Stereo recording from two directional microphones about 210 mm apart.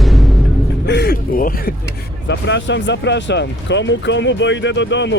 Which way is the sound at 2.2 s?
55° left (ahead or behind).